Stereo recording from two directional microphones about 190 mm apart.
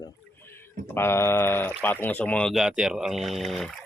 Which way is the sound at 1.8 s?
10° left (ahead or behind).